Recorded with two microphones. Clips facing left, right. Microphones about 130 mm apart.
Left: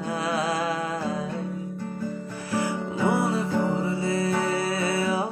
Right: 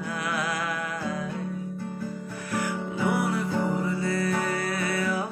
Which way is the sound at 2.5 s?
25° left (ahead or behind).